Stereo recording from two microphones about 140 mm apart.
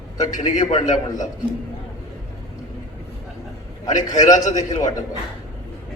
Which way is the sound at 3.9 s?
65° left (ahead or behind).